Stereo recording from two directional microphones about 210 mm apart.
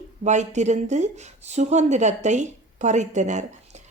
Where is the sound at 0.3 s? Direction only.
35° right (ahead or behind).